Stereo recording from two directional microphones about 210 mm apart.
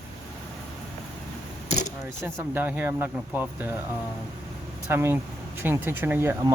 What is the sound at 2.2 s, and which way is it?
Speech, 10° right (ahead or behind).